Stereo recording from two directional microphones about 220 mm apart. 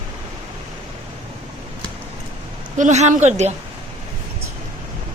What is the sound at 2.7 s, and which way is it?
Speech, 35° right (ahead or behind).